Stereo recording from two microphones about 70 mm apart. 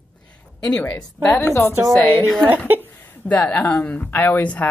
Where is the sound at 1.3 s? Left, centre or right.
Left.